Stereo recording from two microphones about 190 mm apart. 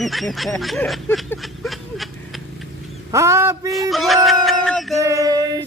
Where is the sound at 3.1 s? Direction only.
15° right (ahead or behind).